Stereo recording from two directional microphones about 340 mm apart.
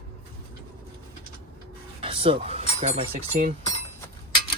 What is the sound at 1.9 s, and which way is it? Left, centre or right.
Speech, centre.